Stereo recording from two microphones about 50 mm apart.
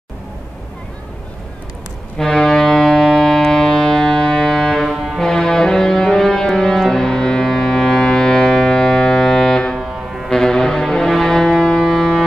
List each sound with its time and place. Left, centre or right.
2.1 s music: centre
5.2 s brass instrument: centre
9.8 s music: centre
10.3 s music: centre